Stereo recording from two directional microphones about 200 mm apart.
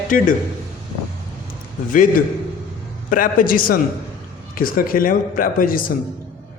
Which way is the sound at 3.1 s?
45° left (ahead or behind).